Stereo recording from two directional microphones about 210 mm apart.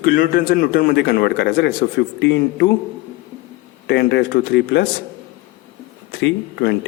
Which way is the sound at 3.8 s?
55° left (ahead or behind).